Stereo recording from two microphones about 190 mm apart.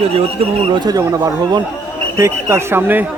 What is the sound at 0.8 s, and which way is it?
A man's voice, 20° right (ahead or behind).